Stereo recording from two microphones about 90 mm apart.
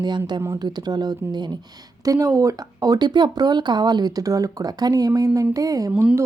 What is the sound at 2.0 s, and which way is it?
A woman's voice, 40° right (ahead or behind).